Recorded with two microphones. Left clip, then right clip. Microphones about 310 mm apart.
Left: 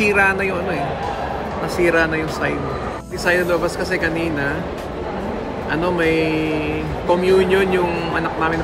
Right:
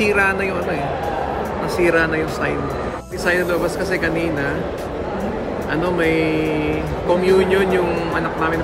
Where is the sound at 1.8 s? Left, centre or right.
Centre.